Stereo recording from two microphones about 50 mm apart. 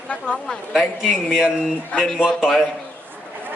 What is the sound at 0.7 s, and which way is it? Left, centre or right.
A man's voice, centre.